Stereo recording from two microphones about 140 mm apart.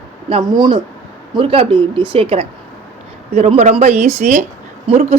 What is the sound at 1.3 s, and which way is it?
A man's voice, 40° right (ahead or behind).